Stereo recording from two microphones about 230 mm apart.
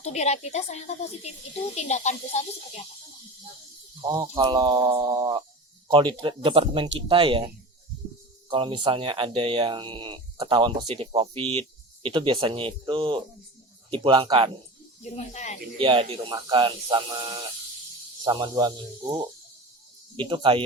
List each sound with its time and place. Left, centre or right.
0.0 s a woman's voice: left
4.0 s speech: centre
15.1 s a woman's voice: left
15.8 s speech: right